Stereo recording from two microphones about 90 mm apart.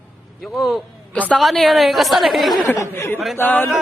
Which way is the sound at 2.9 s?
25° left (ahead or behind).